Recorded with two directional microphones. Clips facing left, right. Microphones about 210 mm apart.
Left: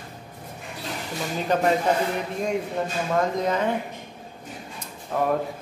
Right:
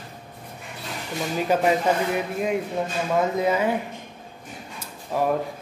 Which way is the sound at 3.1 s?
5° right (ahead or behind).